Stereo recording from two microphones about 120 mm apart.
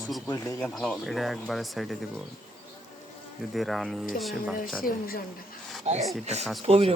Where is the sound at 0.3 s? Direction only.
30° left (ahead or behind).